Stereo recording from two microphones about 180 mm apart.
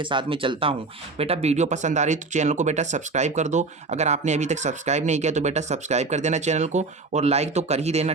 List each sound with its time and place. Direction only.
0.0 s speech: 25° right (ahead or behind)